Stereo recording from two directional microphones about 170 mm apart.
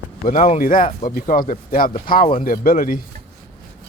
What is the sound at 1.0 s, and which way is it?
Speech, 55° left (ahead or behind).